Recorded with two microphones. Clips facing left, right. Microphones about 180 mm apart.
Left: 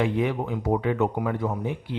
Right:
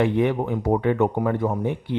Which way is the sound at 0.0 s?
55° right (ahead or behind).